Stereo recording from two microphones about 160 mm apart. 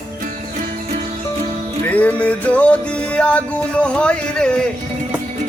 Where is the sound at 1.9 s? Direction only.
10° left (ahead or behind).